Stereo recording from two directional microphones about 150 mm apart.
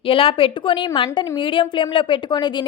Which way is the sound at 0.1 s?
35° left (ahead or behind).